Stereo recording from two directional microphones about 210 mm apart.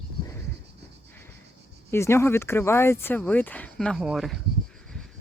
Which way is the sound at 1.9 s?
10° left (ahead or behind).